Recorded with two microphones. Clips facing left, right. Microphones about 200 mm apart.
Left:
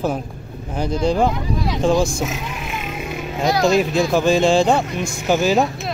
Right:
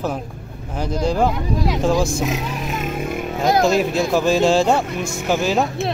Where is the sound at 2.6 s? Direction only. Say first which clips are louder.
Right 4 dB; 40° right (ahead or behind).